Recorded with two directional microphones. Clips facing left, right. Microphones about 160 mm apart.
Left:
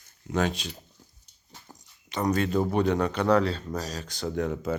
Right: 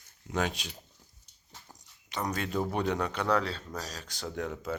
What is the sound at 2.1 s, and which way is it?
Speech, 5° right (ahead or behind).